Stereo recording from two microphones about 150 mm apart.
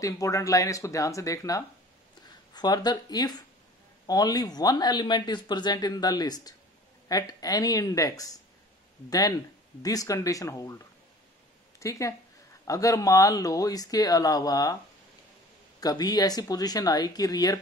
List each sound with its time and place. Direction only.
0.0 s speech: 20° left (ahead or behind)
9.8 s speech: 25° left (ahead or behind)
11.8 s speech: 20° left (ahead or behind)
15.8 s speech: 25° left (ahead or behind)